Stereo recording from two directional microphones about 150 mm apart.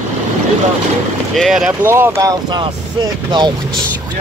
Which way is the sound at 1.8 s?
15° right (ahead or behind).